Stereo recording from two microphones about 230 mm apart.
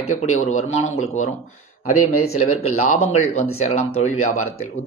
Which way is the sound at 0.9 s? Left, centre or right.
Left.